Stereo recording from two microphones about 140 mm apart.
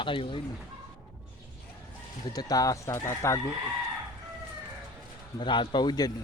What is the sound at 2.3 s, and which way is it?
Speech, 25° left (ahead or behind).